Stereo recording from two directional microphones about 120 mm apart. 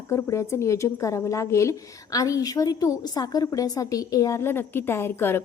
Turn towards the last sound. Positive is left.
turn(degrees=20)  # may be behind; listen again after turning